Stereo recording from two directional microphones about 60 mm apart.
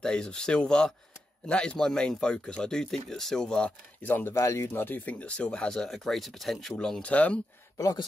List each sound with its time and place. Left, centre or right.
0.0 s speech: centre
4.0 s speech: left
4.4 s speech: left
4.7 s speech: left; by 6.7 s centre
6.8 s speech: centre